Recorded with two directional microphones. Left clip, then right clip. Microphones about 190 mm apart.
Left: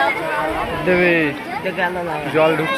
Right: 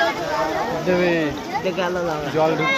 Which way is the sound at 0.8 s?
25° left (ahead or behind).